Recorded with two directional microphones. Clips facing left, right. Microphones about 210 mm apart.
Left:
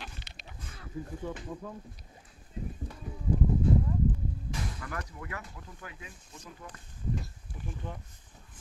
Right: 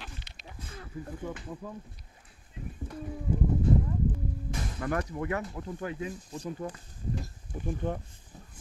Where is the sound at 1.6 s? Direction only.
5° right (ahead or behind).